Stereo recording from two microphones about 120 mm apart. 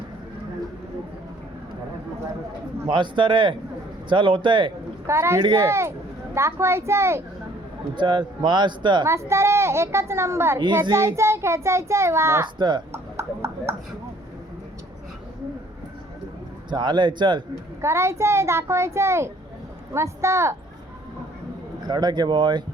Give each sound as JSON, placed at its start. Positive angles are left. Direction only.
{"t": 2.9, "sound": "speech", "side_deg": -40}
{"t": 5.0, "sound": "a child's voice", "side_deg": -25}
{"t": 5.4, "sound": "speech", "side_deg": -40}
{"t": 5.6, "sound": "a child's voice", "side_deg": -25}
{"t": 7.9, "sound": "speech", "side_deg": -40}
{"t": 9.0, "sound": "a child's voice", "side_deg": -25}
{"t": 12.5, "sound": "speech", "side_deg": -40}
{"t": 12.9, "sound": "a sound", "side_deg": -25}
{"t": 16.6, "sound": "speech", "side_deg": -40}
{"t": 17.7, "sound": "a child's voice", "side_deg": -25}
{"t": 21.8, "sound": "speech", "side_deg": -35}